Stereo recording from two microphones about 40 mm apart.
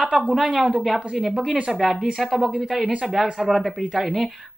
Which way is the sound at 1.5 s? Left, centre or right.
Right.